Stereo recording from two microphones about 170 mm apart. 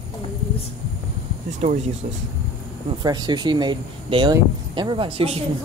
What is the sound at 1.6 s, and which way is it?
Speech, 45° right (ahead or behind).